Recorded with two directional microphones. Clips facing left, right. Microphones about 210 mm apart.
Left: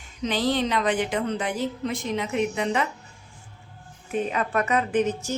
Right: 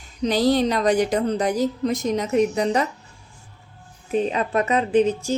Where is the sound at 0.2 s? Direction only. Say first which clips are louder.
Right 5 dB; 40° right (ahead or behind).